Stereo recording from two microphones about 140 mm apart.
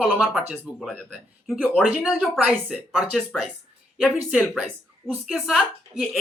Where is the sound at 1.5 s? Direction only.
Centre (ahead or behind).